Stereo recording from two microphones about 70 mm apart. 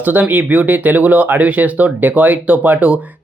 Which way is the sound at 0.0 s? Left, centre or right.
Right.